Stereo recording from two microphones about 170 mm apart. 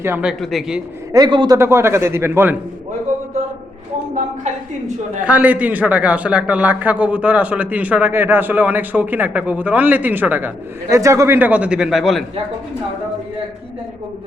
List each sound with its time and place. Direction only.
0.0 s speech: 10° right (ahead or behind)
1.1 s a man's voice: 25° right (ahead or behind)
1.5 s a man's voice: 15° right (ahead or behind)
5.2 s a man's voice: 10° right (ahead or behind)